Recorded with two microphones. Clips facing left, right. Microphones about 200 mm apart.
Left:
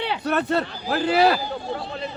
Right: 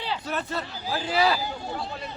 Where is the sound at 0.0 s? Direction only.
65° left (ahead or behind).